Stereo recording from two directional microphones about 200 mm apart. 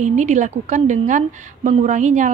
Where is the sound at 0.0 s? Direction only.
35° right (ahead or behind).